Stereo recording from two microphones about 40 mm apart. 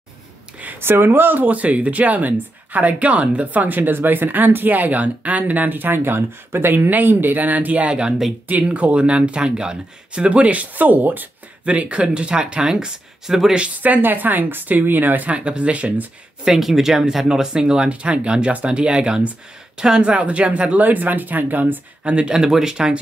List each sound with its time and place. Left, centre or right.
0.7 s speech: right
1.4 s speech: right
3.4 s speech: right
3.9 s speech: right; by 10.2 s centre
10.2 s speech: right
11.6 s speech: right; by 13.4 s centre
13.8 s speech: right
15.3 s speech: right
16.4 s speech: centre
17.3 s speech: centre
20.8 s speech: right
22.0 s speech: right